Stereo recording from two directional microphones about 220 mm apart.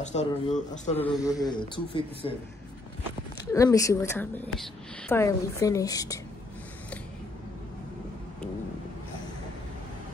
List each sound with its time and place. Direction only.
0.0 s speech: 30° left (ahead or behind)
1.2 s a woman's voice: 15° left (ahead or behind)
3.5 s a woman's voice: 15° left (ahead or behind)